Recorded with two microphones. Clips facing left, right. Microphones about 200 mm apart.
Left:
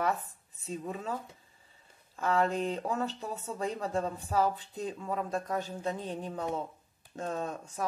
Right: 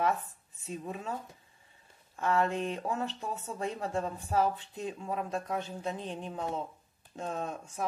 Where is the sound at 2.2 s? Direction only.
35° left (ahead or behind).